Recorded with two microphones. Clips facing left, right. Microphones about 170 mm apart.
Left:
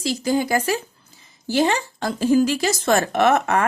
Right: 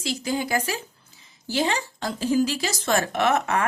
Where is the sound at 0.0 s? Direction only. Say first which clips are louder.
Left 6 dB; 40° left (ahead or behind).